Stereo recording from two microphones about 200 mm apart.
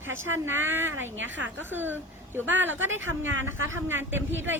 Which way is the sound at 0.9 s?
75° right (ahead or behind).